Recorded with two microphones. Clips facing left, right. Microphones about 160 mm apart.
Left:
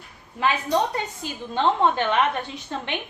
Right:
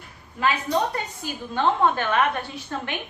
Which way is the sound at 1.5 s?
20° left (ahead or behind).